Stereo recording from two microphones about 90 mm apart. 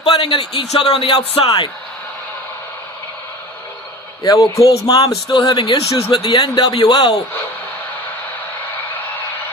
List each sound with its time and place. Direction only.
0.0 s speech: 80° left
4.2 s speech: 40° left (ahead or behind)
5.6 s speech: 75° left (ahead or behind)
6.6 s a man's voice: 65° left (ahead or behind)